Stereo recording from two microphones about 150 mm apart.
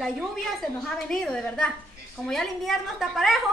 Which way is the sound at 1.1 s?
5° left (ahead or behind).